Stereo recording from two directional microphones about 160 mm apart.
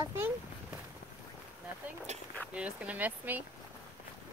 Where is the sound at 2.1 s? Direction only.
45° right (ahead or behind).